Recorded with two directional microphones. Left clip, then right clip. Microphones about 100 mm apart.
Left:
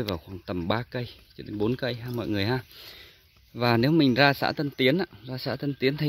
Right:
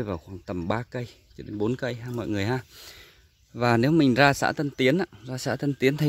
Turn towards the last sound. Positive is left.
turn(degrees=-35)  # may be behind; listen again after turning